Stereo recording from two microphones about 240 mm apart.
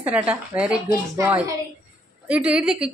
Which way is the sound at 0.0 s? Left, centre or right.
Centre.